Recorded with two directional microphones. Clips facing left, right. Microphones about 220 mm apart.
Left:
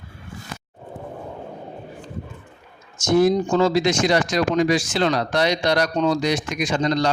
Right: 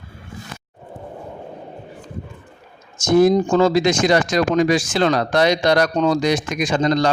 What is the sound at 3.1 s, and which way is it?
Speech, 45° right (ahead or behind).